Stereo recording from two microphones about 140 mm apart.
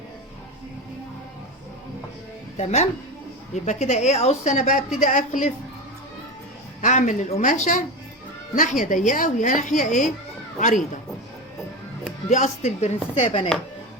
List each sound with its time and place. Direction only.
2.6 s a woman's voice: 55° left (ahead or behind)
6.8 s speech: 60° left (ahead or behind)
12.3 s a woman's voice: 55° left (ahead or behind)
13.2 s chopping: 40° left (ahead or behind)